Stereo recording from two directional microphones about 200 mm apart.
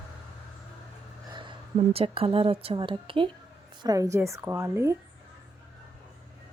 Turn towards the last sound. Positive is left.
turn(degrees=-15)  # may be behind; listen again after turning